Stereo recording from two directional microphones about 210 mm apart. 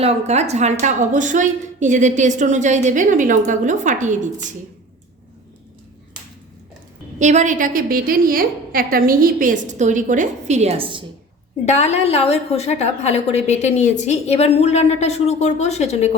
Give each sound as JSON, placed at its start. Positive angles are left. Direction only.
{"t": 0.0, "sound": "a woman's voice", "side_deg": -30}
{"t": 7.2, "sound": "a woman's voice", "side_deg": -35}
{"t": 11.6, "sound": "a woman's voice", "side_deg": 30}